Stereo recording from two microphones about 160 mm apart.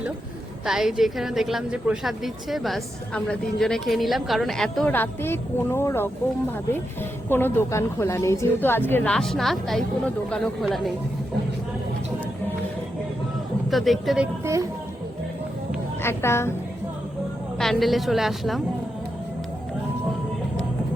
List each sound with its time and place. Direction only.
0.6 s a woman's voice: 5° right (ahead or behind); by 6.1 s 15° left (ahead or behind)
7.3 s a woman's voice: 15° left (ahead or behind)
13.7 s a woman's voice: centre (ahead or behind)
14.4 s speech: 20° right (ahead or behind)
16.0 s a woman's voice: 15° left (ahead or behind)
17.6 s a woman's voice: centre (ahead or behind)